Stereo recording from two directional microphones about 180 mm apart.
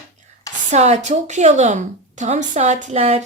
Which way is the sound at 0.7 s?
40° right (ahead or behind).